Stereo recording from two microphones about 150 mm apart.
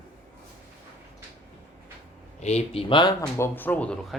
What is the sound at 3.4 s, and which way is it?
Speech, 15° left (ahead or behind).